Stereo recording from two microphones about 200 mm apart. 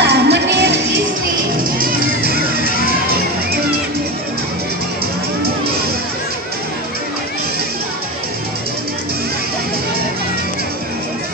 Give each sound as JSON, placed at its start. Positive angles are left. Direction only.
{"t": 0.0, "sound": "music", "side_deg": -60}
{"t": 1.8, "sound": "music", "side_deg": -50}